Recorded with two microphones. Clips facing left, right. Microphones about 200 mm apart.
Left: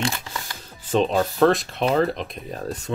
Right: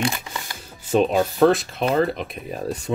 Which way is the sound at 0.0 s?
15° right (ahead or behind).